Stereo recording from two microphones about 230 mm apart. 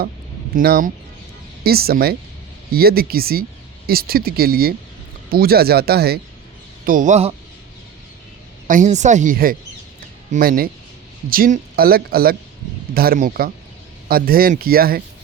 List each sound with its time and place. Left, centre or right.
0.5 s speech: right
8.6 s speech: right